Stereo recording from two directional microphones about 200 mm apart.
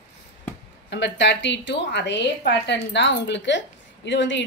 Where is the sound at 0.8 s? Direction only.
60° left (ahead or behind).